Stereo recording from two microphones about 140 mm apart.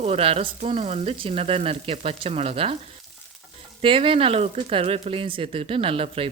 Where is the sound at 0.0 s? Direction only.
45° right (ahead or behind).